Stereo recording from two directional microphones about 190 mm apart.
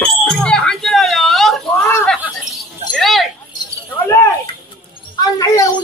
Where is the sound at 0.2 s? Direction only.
5° left (ahead or behind).